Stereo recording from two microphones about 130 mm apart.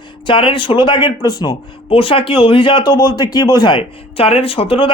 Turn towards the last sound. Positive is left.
turn(degrees=45)  # may be behind; listen again after turning